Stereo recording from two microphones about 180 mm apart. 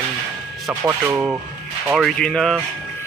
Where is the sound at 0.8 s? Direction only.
15° right (ahead or behind).